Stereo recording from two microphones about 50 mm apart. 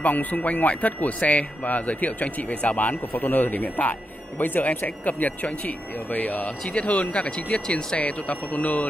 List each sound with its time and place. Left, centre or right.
0.0 s speech: left